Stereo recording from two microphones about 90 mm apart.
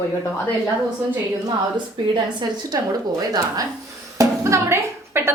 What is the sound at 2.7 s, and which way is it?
Speech, 45° right (ahead or behind).